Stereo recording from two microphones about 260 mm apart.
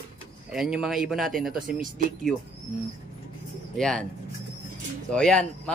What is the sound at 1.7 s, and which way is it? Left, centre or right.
Speech, right.